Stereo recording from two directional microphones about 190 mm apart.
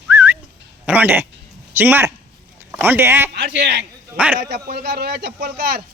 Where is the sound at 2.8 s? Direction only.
10° right (ahead or behind).